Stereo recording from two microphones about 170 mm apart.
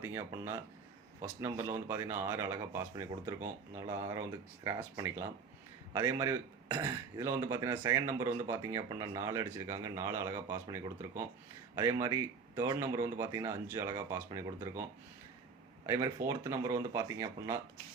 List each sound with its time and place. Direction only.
0.0 s speech: 15° right (ahead or behind)
15.9 s speech: 20° right (ahead or behind)